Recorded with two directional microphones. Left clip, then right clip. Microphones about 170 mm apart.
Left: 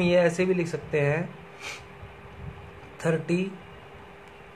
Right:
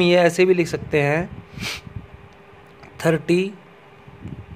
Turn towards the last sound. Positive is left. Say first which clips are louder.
# right 8 dB
turn(degrees=-75)  # may be behind; listen again after turning